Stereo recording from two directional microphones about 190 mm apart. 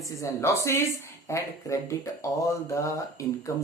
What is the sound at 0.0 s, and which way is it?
Speech, 15° left (ahead or behind).